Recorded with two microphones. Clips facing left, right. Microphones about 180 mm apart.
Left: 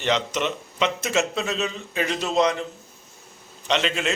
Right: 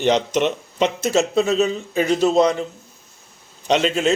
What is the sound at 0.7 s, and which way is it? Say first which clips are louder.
A man's voice: right 4 dB; 40° right (ahead or behind).